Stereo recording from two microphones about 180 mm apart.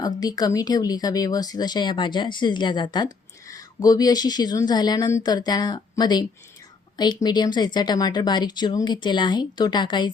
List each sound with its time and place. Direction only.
0.0 s speech: 20° left (ahead or behind)